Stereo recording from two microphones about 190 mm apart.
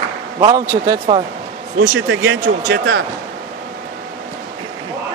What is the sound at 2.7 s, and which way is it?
Speech, 90° right.